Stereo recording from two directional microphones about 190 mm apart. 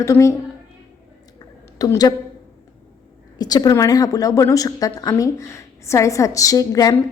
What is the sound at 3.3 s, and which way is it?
A woman's voice, 20° left (ahead or behind).